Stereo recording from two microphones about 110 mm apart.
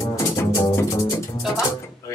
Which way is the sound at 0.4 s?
25° left (ahead or behind).